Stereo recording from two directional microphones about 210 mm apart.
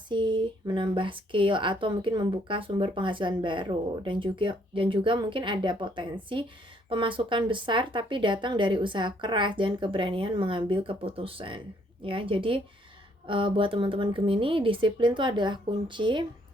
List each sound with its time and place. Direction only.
0.1 s speech: 20° right (ahead or behind)